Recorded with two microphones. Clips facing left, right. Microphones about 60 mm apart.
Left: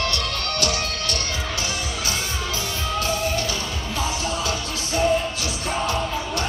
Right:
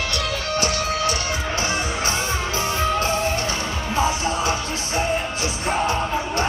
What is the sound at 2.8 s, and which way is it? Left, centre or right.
Music, right.